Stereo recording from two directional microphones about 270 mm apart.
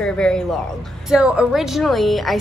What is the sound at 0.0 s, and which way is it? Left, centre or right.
Speech, centre.